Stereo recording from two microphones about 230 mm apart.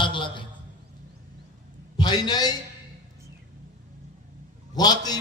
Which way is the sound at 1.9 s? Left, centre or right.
Centre.